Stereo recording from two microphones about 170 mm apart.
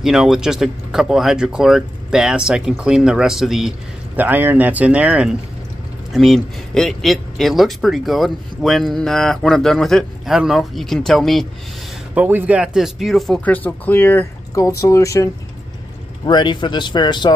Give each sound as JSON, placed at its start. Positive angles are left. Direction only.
{"t": 0.0, "sound": "a man's voice", "side_deg": 0}
{"t": 12.1, "sound": "speech", "side_deg": -10}
{"t": 16.3, "sound": "speech", "side_deg": 25}